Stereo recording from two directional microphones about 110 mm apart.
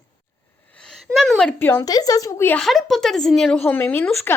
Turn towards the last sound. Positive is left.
turn(degrees=20)  # may be behind; listen again after turning